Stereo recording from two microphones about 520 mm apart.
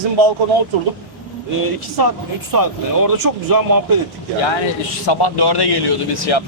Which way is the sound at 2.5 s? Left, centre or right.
Right.